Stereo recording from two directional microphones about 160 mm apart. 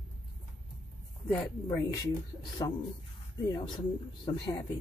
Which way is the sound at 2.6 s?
30° left (ahead or behind).